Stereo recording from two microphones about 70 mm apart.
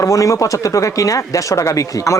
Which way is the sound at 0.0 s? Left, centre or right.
Left.